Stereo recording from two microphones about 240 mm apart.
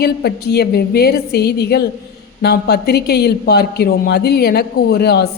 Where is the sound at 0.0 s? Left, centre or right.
Left.